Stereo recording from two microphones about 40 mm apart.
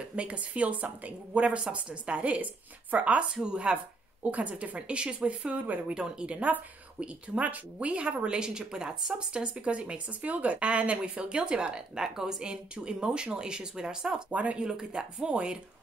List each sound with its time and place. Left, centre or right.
0.1 s speech: right
3.4 s speech: right
3.7 s speech: right
5.9 s speech: right
7.0 s speech: right; by 14.2 s centre
14.3 s speech: right
14.6 s speech: right